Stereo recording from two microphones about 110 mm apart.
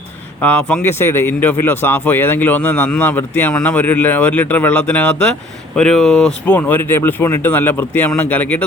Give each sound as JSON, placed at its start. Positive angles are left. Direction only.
{"t": 0.4, "sound": "speech", "side_deg": 10}
{"t": 0.8, "sound": "speech", "side_deg": 20}